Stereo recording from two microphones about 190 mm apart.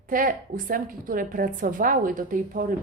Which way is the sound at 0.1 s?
45° right (ahead or behind).